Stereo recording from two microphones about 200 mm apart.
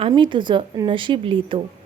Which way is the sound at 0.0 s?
25° right (ahead or behind).